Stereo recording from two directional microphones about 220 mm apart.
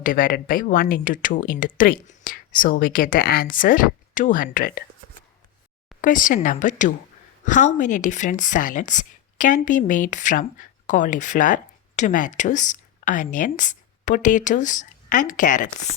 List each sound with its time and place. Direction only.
0.0 s speech: 40° left (ahead or behind)
6.0 s a woman's voice: 35° left (ahead or behind)